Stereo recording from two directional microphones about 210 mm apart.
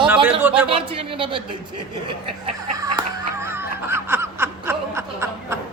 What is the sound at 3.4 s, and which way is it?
Snicker, 10° right (ahead or behind).